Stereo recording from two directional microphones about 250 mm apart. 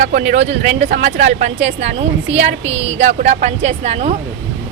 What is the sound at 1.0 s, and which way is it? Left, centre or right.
A woman's voice, right.